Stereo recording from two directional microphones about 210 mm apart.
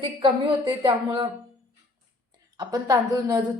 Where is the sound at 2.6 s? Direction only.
15° right (ahead or behind).